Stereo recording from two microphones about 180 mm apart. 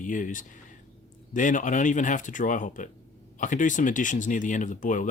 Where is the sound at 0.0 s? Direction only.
45° left (ahead or behind).